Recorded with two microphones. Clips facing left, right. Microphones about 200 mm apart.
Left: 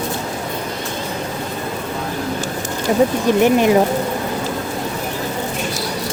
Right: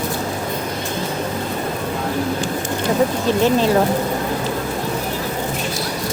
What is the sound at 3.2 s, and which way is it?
Speech, 15° left (ahead or behind).